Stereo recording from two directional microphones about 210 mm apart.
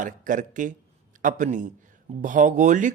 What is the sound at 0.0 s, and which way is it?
A man's voice, 40° right (ahead or behind).